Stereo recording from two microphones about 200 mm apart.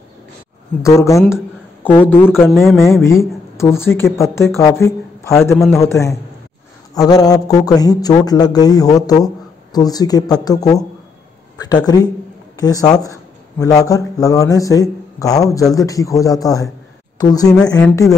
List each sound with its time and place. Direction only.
0.8 s a man's voice: 15° left (ahead or behind)
2.5 s a man's voice: centre (ahead or behind)
2.8 s a man's voice: 15° left (ahead or behind)
5.3 s a man's voice: centre (ahead or behind)
5.7 s a man's voice: 15° left (ahead or behind)